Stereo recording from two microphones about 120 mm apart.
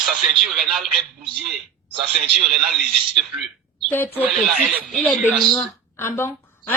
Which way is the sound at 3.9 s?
15° left (ahead or behind).